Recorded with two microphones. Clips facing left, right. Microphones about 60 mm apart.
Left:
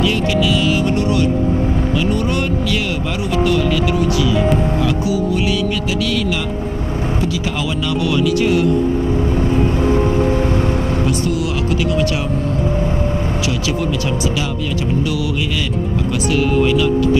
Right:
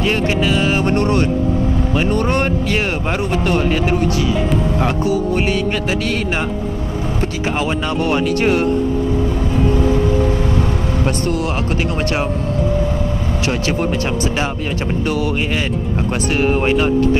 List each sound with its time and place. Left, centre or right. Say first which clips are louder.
0.0 s speech: left 1 dB; right
11.1 s speech: even; right
13.5 s speech: right 4 dB; right